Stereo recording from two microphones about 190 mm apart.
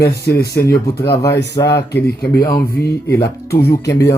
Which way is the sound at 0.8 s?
15° left (ahead or behind).